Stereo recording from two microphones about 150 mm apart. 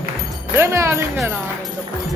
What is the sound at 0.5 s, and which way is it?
Speech, 20° right (ahead or behind).